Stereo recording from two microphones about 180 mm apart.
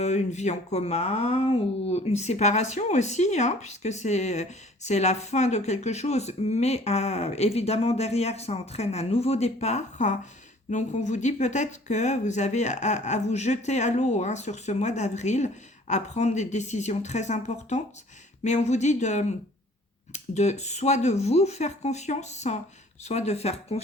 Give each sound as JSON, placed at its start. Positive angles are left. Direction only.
{"t": 0.0, "sound": "speech", "side_deg": 40}